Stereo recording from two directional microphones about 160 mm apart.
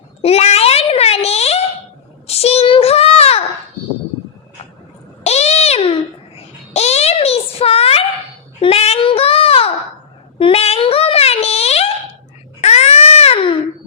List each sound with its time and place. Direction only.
0.2 s a sound: 40° left (ahead or behind)
2.2 s child singing: 40° left (ahead or behind)
5.2 s babbling: 40° left (ahead or behind)
8.6 s child singing: 40° left (ahead or behind)
10.3 s a sound: 35° left (ahead or behind)
12.6 s baby cry: 45° left (ahead or behind)